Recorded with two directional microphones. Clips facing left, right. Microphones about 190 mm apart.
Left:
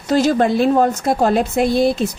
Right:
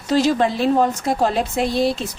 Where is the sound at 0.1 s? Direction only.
50° left (ahead or behind).